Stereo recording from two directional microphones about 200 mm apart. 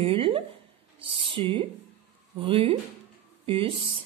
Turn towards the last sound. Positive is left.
turn(degrees=-25)  # may be behind; listen again after turning